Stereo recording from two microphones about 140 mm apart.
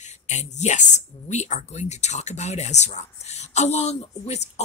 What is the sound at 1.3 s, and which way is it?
Speech, 55° left (ahead or behind).